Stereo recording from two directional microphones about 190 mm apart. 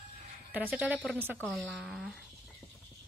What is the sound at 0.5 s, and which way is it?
A woman's voice, 10° right (ahead or behind).